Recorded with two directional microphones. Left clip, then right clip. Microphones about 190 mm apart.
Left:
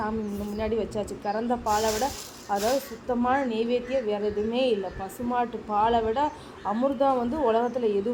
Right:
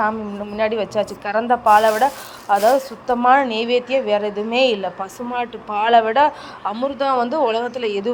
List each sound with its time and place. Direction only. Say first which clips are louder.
0.5 s a man's voice: right 10 dB; 15° right (ahead or behind)